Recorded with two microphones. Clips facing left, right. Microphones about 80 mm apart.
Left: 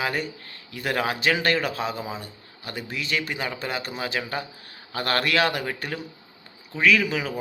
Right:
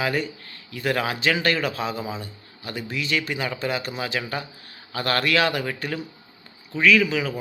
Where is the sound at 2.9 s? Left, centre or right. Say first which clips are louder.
Right 2 dB; left.